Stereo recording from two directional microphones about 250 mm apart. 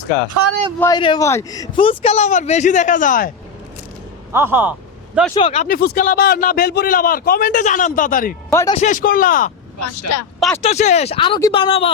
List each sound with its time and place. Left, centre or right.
0.8 s a man's voice: centre; by 3.3 s left
4.3 s speech: centre
5.3 s a man's voice: left
5.6 s a man's voice: left
8.4 s speech: centre
8.7 s a man's voice: left
9.7 s speech: left
10.6 s a man's voice: left